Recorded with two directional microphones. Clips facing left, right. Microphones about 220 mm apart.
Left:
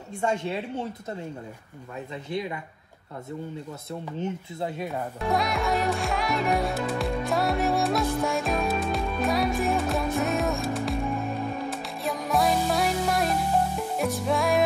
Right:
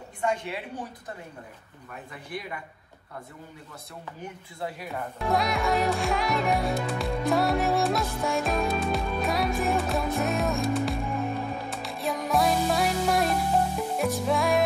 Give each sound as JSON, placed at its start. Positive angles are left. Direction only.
{"t": 0.2, "sound": "speech", "side_deg": 25}
{"t": 4.2, "sound": "speech", "side_deg": 25}
{"t": 5.2, "sound": "music", "side_deg": 0}